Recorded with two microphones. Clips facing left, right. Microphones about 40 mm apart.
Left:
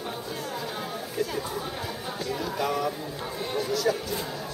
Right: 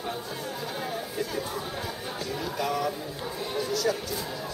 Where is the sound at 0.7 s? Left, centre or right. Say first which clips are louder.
Even; centre.